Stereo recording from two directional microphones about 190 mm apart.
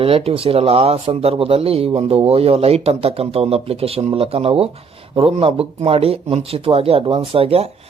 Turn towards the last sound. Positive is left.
turn(degrees=-30)  # may be behind; listen again after turning